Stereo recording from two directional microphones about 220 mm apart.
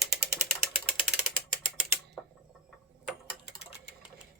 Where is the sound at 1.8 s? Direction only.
5° right (ahead or behind).